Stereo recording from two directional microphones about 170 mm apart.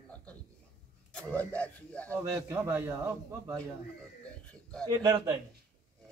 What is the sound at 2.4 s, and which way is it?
A man's voice, 15° right (ahead or behind).